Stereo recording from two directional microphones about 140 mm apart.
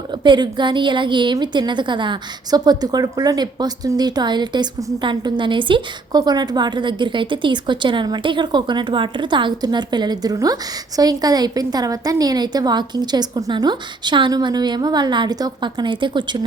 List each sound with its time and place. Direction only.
0.1 s a woman's voice: 35° right (ahead or behind)